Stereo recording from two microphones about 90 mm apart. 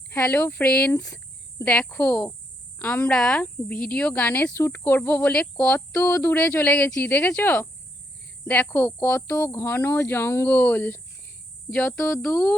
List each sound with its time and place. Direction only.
0.1 s speech: 15° left (ahead or behind)
8.7 s speech: 20° left (ahead or behind)